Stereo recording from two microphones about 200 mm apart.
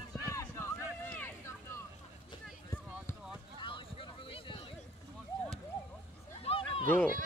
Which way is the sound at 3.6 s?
25° left (ahead or behind).